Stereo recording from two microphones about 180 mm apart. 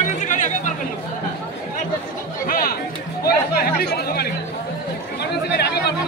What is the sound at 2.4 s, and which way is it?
Chatter, 55° left (ahead or behind).